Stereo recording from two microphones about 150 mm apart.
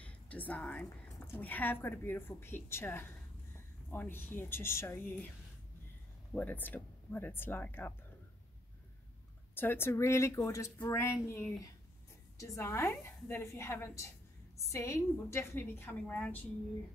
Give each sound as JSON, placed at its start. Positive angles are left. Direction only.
{"t": 0.0, "sound": "a sound", "side_deg": 10}
{"t": 0.8, "sound": "a woman's voice", "side_deg": 15}
{"t": 6.3, "sound": "a woman's voice", "side_deg": 10}
{"t": 9.6, "sound": "a woman's voice", "side_deg": 15}